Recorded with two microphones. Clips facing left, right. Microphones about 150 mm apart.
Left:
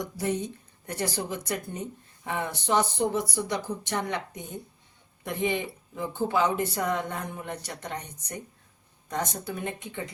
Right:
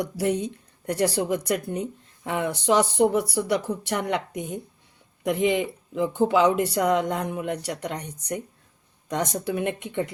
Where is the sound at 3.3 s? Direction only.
70° right (ahead or behind).